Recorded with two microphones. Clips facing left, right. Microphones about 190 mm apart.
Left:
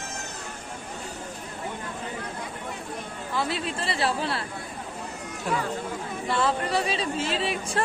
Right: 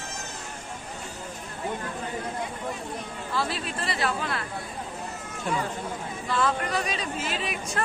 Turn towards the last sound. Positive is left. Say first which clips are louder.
# left 3 dB
turn(degrees=30)  # may be behind; listen again after turning